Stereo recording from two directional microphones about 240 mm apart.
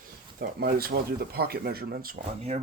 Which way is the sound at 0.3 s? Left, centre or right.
Right.